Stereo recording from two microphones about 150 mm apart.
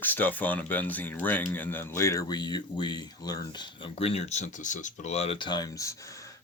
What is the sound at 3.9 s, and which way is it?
Speech, 40° left (ahead or behind).